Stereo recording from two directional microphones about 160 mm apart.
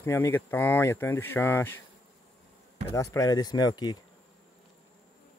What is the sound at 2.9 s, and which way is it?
Speech, 20° left (ahead or behind).